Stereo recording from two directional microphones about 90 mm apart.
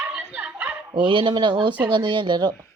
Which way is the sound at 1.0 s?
60° right (ahead or behind).